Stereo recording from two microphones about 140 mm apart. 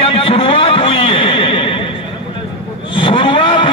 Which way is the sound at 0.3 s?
40° left (ahead or behind).